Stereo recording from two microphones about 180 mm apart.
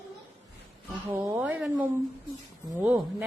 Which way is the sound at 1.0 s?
10° right (ahead or behind).